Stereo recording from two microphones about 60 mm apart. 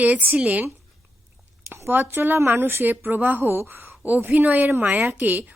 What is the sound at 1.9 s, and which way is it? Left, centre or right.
A woman's voice, right.